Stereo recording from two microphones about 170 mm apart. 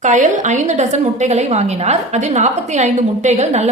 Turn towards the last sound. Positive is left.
turn(degrees=-40)  # may be behind; listen again after turning